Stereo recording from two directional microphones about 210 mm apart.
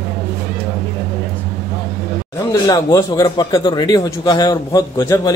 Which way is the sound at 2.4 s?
15° left (ahead or behind).